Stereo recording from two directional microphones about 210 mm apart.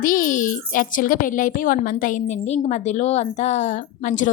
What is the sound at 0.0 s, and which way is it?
A child's voice, 40° left (ahead or behind).